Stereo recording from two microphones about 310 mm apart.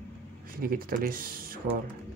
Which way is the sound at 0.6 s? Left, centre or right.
Right.